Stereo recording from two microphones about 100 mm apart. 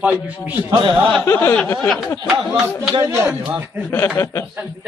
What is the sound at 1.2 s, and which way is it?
Speech, 25° left (ahead or behind).